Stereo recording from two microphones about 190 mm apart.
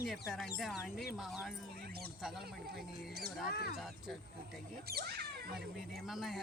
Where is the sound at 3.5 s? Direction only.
55° left (ahead or behind).